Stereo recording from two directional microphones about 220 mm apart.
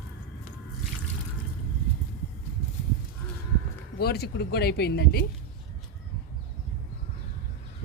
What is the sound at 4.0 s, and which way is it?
Speech, 45° left (ahead or behind).